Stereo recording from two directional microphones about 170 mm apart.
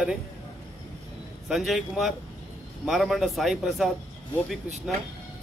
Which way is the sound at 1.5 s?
Centre (ahead or behind).